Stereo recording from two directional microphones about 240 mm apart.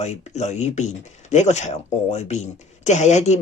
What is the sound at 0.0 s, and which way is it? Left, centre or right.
Speech, left.